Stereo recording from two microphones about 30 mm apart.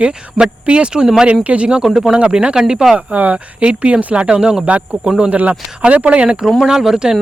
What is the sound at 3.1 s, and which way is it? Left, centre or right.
Speech, right.